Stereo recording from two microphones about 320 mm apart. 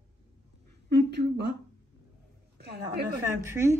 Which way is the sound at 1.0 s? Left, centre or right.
Right.